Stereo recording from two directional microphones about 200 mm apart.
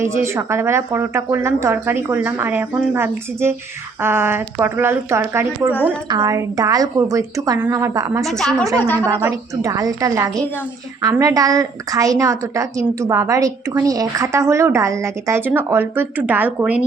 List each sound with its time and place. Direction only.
0.0 s a woman's voice: 15° right (ahead or behind)
8.2 s a woman's voice: centre (ahead or behind)
9.0 s a woman's voice: 15° right (ahead or behind)